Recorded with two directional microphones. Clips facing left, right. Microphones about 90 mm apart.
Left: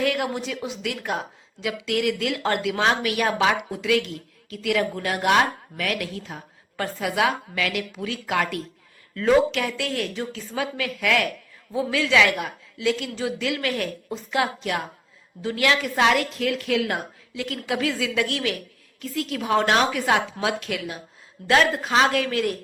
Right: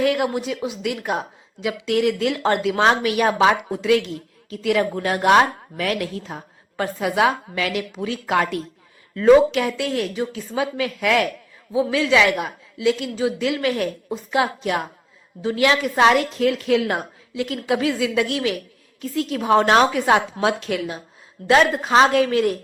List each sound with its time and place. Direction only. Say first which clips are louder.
0.0 s a woman's voice: right 4 dB; 20° right (ahead or behind)
9.1 s a woman's voice: right 6 dB; 20° right (ahead or behind)